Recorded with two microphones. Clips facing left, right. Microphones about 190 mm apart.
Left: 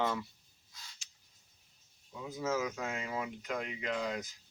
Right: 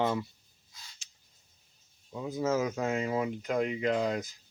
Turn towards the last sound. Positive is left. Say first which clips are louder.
# right 7 dB
turn(degrees=-40)  # may be behind; listen again after turning